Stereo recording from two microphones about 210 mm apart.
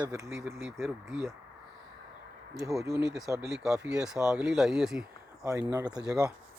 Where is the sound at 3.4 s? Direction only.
Centre (ahead or behind).